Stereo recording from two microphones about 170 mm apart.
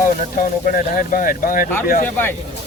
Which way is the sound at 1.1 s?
55° left (ahead or behind).